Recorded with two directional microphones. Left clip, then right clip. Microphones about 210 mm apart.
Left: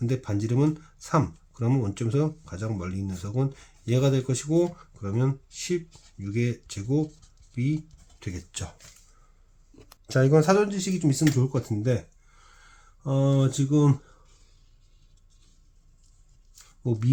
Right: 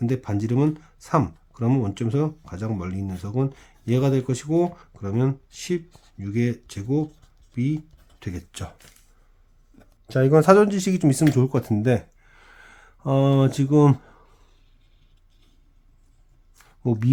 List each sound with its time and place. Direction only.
0.0 s speech: 30° right (ahead or behind)
10.1 s speech: 10° right (ahead or behind)
10.3 s speech: 30° right (ahead or behind)
16.8 s speech: 40° right (ahead or behind)